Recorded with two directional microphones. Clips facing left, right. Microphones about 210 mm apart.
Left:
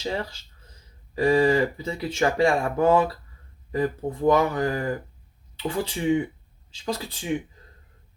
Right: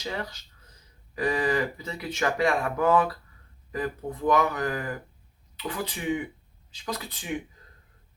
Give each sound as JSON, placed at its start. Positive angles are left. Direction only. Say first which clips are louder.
{"t": 0.0, "sound": "speech", "louder": "left 4 dB", "side_deg": 30}